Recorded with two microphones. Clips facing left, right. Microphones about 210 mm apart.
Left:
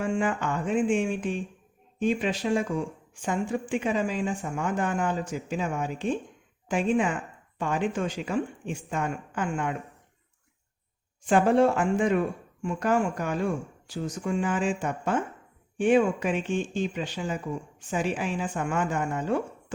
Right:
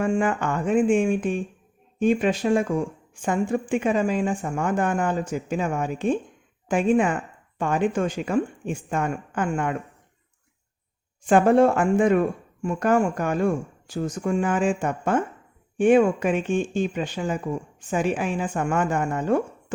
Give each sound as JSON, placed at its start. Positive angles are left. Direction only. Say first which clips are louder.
{"t": 0.0, "sound": "speech", "louder": "right 4 dB", "side_deg": -50}
{"t": 11.3, "sound": "speech", "louder": "right 4 dB", "side_deg": -50}